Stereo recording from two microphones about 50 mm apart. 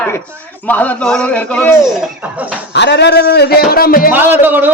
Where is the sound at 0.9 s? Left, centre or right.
Centre.